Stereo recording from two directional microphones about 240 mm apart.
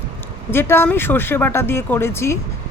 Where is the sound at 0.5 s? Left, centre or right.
Centre.